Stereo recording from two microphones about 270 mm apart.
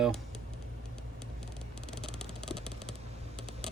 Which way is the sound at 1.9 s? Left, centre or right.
Centre.